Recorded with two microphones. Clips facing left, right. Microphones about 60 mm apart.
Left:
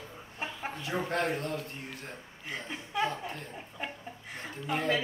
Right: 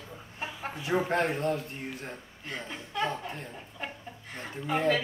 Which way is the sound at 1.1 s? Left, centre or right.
Right.